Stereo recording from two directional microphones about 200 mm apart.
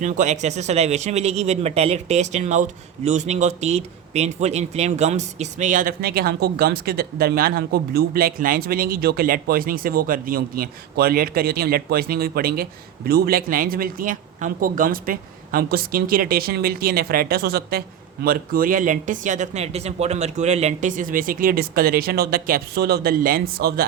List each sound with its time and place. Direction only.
0.0 s speech: 40° right (ahead or behind)